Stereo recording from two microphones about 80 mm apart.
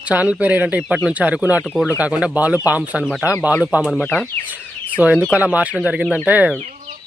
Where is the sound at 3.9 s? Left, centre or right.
Centre.